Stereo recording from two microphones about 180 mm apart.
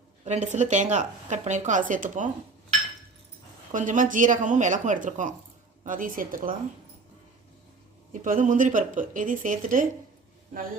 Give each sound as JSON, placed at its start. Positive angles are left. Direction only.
{"t": 0.3, "sound": "speech", "side_deg": -40}
{"t": 3.7, "sound": "speech", "side_deg": -45}
{"t": 8.1, "sound": "speech", "side_deg": -45}